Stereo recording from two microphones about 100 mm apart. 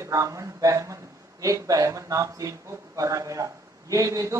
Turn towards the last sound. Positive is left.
turn(degrees=-35)  # may be behind; listen again after turning